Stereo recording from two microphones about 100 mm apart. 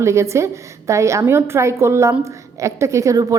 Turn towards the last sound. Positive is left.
turn(degrees=-35)  # may be behind; listen again after turning